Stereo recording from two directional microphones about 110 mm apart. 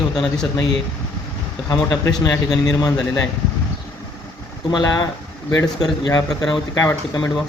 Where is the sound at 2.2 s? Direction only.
35° left (ahead or behind).